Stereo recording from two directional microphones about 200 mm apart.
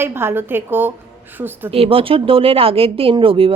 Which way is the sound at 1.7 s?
30° right (ahead or behind).